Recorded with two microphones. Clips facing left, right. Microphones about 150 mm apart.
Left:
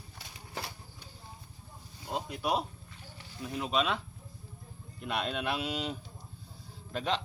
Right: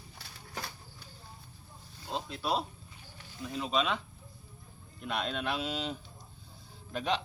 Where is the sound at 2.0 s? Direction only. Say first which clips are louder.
Left 1 dB; 15° left (ahead or behind).